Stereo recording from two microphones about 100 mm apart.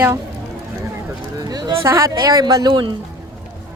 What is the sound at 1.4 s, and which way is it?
Speech, 40° right (ahead or behind).